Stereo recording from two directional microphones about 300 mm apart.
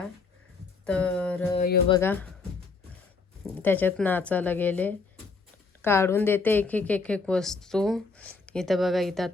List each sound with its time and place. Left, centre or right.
0.9 s speech: centre
1.5 s speech: left
1.9 s speech: centre
3.6 s speech: centre